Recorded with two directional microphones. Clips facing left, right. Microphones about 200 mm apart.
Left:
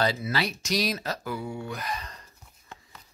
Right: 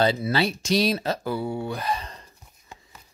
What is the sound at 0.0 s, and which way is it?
Speech, 25° right (ahead or behind).